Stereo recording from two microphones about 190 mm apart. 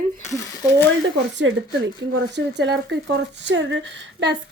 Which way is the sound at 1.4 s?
90° right.